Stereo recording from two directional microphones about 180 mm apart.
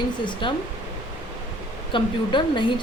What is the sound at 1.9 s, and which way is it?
Speech, 25° left (ahead or behind).